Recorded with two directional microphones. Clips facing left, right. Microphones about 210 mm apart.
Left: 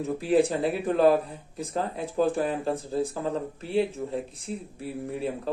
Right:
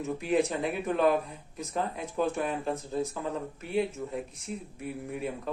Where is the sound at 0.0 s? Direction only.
35° left (ahead or behind).